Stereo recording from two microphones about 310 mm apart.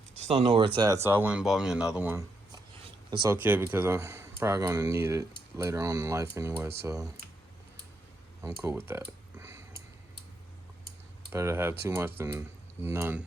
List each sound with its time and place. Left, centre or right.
0.2 s speech: centre
8.4 s speech: centre
11.3 s speech: centre